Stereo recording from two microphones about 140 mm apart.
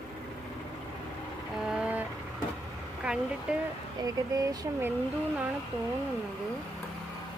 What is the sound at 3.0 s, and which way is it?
Speech, 5° right (ahead or behind).